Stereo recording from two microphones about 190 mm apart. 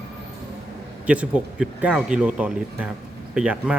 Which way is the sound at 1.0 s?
5° right (ahead or behind).